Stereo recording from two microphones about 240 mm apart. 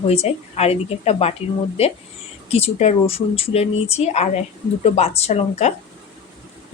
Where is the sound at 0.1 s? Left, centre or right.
Left.